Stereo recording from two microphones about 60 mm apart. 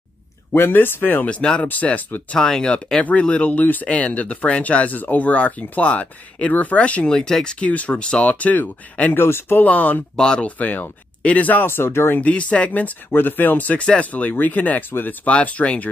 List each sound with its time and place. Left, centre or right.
0.6 s speech: left
2.3 s speech: centre
9.1 s speech: left
9.7 s speech: left
10.1 s speech: centre
10.6 s speech: left
11.6 s speech: left
12.2 s speech: left
15.2 s speech: left